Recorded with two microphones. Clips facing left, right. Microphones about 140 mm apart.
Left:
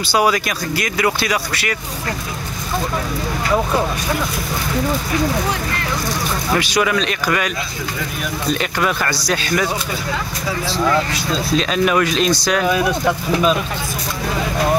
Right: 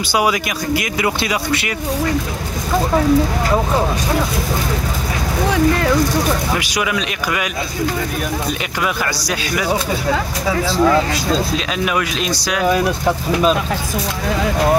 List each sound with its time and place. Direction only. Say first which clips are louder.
0.1 s speech: left 1 dB; 15° right (ahead or behind)
6.5 s speech: left 2 dB; 10° right (ahead or behind)
8.5 s speech: left 2 dB; 10° right (ahead or behind)
10.8 s speech: right 3 dB; 5° right (ahead or behind)